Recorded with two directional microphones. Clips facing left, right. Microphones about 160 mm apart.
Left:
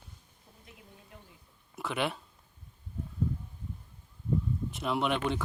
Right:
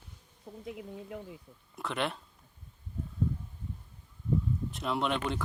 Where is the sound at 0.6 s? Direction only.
90° right.